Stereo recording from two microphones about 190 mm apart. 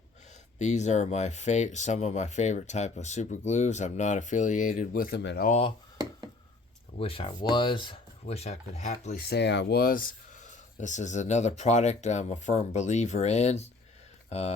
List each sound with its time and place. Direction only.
0.6 s speech: 40° left (ahead or behind)
5.2 s speech: 65° left (ahead or behind)
5.5 s speech: 35° left (ahead or behind)
7.0 s speech: 30° left (ahead or behind)
9.3 s speech: 65° left (ahead or behind); by 14.5 s 35° left (ahead or behind)